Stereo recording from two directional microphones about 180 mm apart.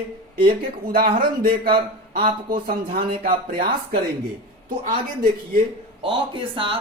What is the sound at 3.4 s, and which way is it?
Speech, 55° right (ahead or behind).